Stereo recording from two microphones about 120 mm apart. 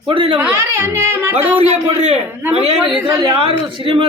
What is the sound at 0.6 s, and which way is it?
Speech, 20° right (ahead or behind).